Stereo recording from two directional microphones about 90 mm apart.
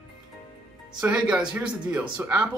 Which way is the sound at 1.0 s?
15° right (ahead or behind).